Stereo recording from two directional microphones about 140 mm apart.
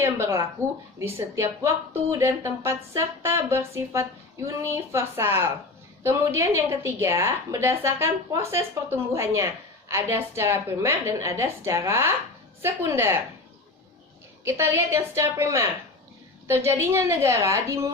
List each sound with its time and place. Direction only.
0.0 s a woman's voice: 20° right (ahead or behind)
14.4 s a woman's voice: 20° right (ahead or behind)